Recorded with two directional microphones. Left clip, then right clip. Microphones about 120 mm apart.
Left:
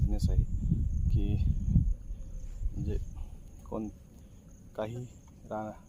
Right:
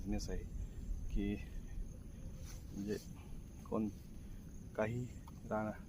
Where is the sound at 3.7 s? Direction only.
25° left (ahead or behind).